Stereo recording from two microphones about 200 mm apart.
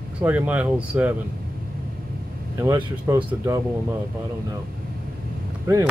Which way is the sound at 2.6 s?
15° right (ahead or behind).